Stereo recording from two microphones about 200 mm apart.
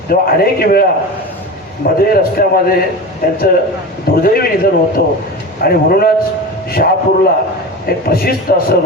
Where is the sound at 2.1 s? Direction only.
50° left (ahead or behind).